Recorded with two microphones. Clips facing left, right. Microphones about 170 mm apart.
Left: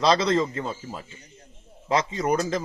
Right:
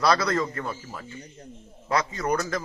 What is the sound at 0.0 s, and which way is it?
A man's voice, 20° left (ahead or behind).